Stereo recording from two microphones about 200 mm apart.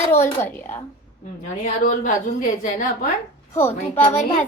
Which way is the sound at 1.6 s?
40° left (ahead or behind).